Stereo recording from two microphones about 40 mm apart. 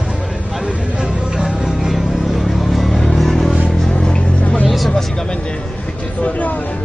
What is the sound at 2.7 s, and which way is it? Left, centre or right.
Music, centre.